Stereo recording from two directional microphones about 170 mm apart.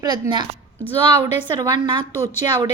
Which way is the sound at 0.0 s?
20° right (ahead or behind).